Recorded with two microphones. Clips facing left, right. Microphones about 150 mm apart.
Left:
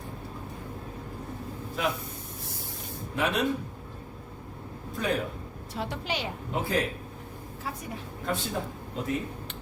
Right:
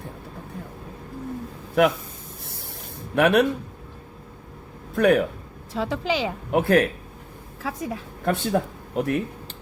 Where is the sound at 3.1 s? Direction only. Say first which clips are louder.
Right 10 dB; 65° right (ahead or behind).